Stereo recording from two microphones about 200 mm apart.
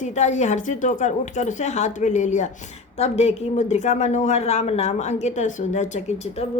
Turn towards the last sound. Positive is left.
turn(degrees=35)  # may be behind; listen again after turning